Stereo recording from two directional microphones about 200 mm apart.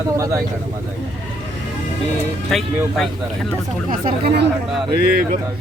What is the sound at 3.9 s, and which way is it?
Speech, 50° right (ahead or behind).